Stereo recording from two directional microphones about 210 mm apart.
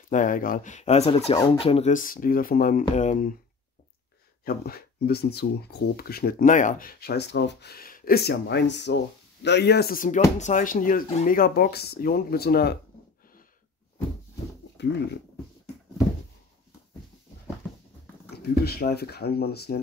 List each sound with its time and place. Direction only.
0.1 s speech: 40° left (ahead or behind)
4.5 s speech: 45° left (ahead or behind)
14.8 s a sound: 55° left (ahead or behind)
18.3 s speech: 50° left (ahead or behind)